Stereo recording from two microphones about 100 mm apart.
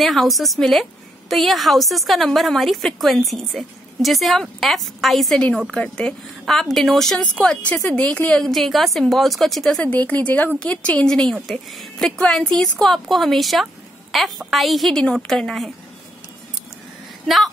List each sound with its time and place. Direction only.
0.0 s a woman's voice: centre (ahead or behind)
9.8 s a woman's voice: 15° left (ahead or behind)